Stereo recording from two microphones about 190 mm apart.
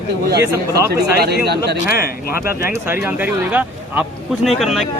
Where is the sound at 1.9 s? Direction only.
50° left (ahead or behind).